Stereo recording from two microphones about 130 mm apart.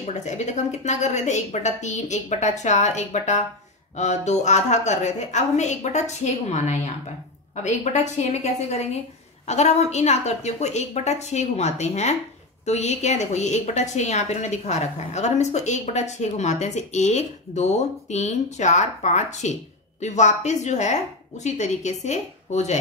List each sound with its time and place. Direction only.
0.0 s a woman's voice: 65° left (ahead or behind)